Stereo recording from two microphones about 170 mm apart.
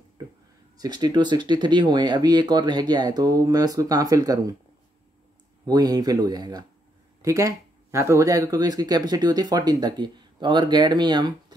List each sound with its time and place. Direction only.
0.7 s speech: 25° right (ahead or behind)
5.7 s speech: 20° right (ahead or behind)